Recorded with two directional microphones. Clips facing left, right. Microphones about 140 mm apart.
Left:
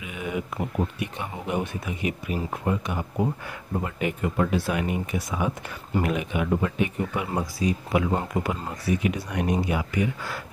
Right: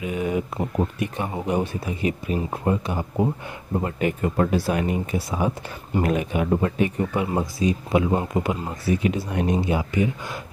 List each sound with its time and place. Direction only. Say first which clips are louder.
0.0 s speech: right 6 dB; 35° right (ahead or behind)
3.8 s speech: right 4 dB; 40° right (ahead or behind)
7.2 s speech: right 3 dB; 25° right (ahead or behind)